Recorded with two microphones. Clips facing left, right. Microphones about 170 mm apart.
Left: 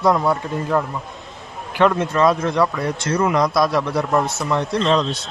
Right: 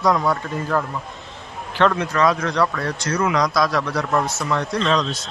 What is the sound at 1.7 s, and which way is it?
Speech, 10° left (ahead or behind).